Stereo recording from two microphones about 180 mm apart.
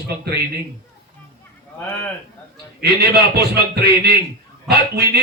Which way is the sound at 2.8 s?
60° right (ahead or behind).